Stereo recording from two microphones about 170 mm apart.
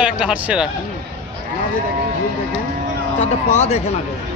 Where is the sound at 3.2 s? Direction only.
40° left (ahead or behind).